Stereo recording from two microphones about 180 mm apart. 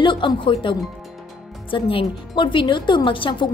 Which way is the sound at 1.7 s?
30° left (ahead or behind).